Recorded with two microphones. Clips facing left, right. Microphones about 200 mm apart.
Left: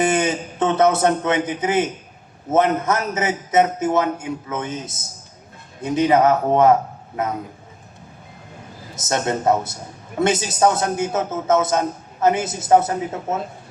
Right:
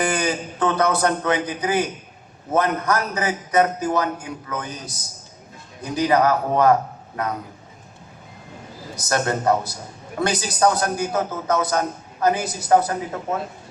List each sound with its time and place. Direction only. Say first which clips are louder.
0.0 s a man's voice: left 3 dB; 25° left (ahead or behind)
9.0 s a man's voice: left 1 dB; 25° left (ahead or behind)